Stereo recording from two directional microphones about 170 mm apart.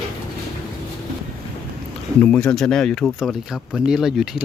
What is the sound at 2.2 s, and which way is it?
Speech, 5° left (ahead or behind).